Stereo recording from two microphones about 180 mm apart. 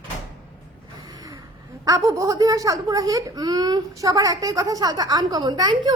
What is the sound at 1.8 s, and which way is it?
A woman's voice, 20° right (ahead or behind).